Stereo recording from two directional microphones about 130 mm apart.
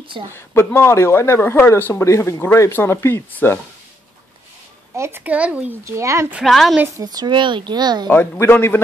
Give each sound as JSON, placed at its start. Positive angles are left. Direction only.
{"t": 0.3, "sound": "speech", "side_deg": 15}
{"t": 4.9, "sound": "speech", "side_deg": -20}
{"t": 5.9, "sound": "speech", "side_deg": -20}
{"t": 6.4, "sound": "a woman's voice", "side_deg": 0}
{"t": 7.0, "sound": "speech", "side_deg": -30}
{"t": 8.1, "sound": "a man's voice", "side_deg": 15}